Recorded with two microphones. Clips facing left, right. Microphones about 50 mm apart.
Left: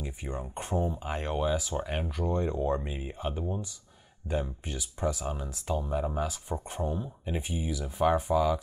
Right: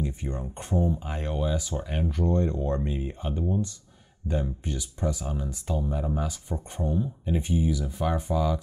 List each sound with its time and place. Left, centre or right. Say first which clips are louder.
0.0 s speech: right 5 dB; centre
2.0 s speech: right 4 dB; centre